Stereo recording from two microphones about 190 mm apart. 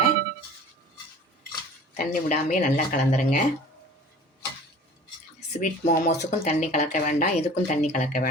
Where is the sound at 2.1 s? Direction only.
45° left (ahead or behind).